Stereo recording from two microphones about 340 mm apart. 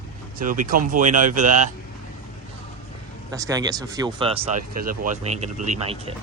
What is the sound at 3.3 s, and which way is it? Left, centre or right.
Speech, centre.